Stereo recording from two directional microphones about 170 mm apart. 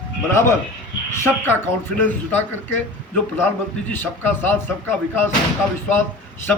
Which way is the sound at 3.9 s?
10° left (ahead or behind).